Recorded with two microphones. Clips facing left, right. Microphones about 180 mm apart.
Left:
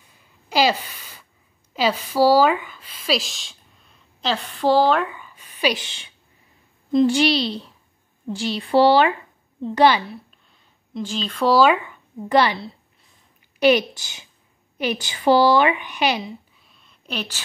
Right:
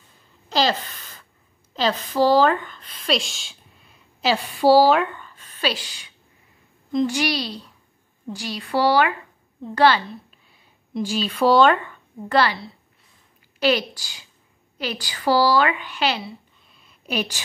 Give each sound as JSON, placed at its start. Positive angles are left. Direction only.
{"t": 0.5, "sound": "a sound", "side_deg": 10}
{"t": 1.7, "sound": "a woman's voice", "side_deg": 10}
{"t": 9.6, "sound": "a woman's voice", "side_deg": 15}
{"t": 10.9, "sound": "a woman's voice", "side_deg": -10}
{"t": 11.5, "sound": "speech", "side_deg": 10}
{"t": 16.7, "sound": "a sound", "side_deg": -5}